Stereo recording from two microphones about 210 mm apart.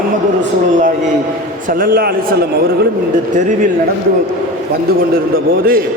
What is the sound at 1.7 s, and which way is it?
Speech, 40° right (ahead or behind).